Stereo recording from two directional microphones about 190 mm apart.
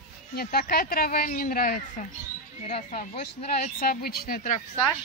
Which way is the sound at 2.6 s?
35° left (ahead or behind).